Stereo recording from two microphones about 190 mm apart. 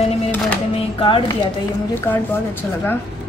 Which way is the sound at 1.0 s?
25° left (ahead or behind).